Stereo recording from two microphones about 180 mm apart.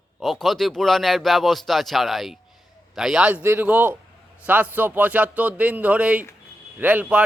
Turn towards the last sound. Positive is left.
turn(degrees=-5)  # may be behind; listen again after turning